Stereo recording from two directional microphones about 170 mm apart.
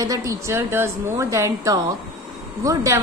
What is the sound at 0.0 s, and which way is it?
A woman's voice, 20° right (ahead or behind).